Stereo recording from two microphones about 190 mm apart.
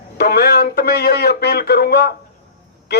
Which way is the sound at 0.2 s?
60° left (ahead or behind).